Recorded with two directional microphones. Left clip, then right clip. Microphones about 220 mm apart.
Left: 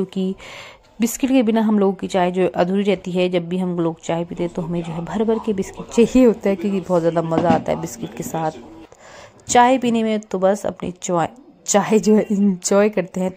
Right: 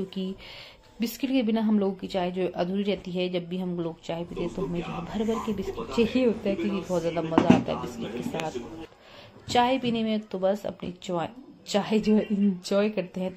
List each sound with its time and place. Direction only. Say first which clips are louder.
0.2 s speech: left 10 dB; 30° left (ahead or behind)
9.5 s speech: left 10 dB; 35° left (ahead or behind)